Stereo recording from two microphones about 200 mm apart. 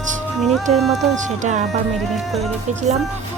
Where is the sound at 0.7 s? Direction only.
30° right (ahead or behind).